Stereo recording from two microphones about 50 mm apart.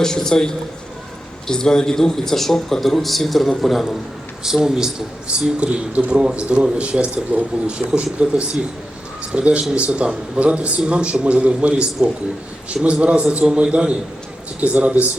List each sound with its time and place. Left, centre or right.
0.0 s a man's voice: centre; by 15.1 s right